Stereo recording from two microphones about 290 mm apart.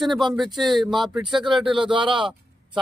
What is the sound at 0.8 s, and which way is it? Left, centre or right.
A man's voice, centre.